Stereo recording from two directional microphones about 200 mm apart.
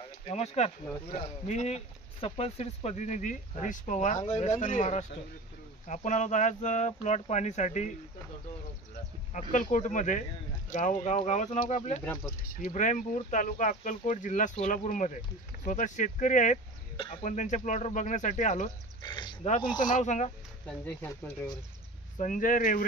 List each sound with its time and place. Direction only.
0.3 s speech: 30° left (ahead or behind)
9.3 s speech: 40° left (ahead or behind)
12.0 s speech: 10° left (ahead or behind)
12.6 s speech: 40° left (ahead or behind)
16.9 s speech: 25° left (ahead or behind)
18.9 s a sound: 25° left (ahead or behind)
19.4 s speech: 35° left (ahead or behind)
20.6 s speech: 10° left (ahead or behind)
22.2 s speech: 40° left (ahead or behind)